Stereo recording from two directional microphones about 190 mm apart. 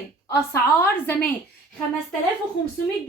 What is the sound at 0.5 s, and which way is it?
Speech, 10° left (ahead or behind).